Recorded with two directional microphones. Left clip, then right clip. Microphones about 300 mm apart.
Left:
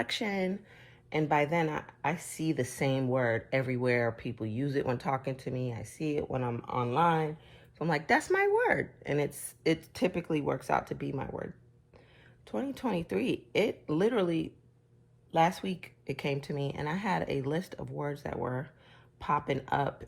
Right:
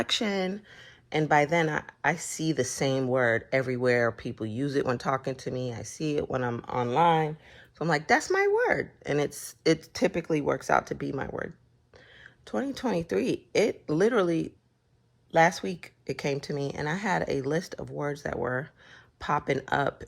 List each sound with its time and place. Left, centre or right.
0.0 s speech: right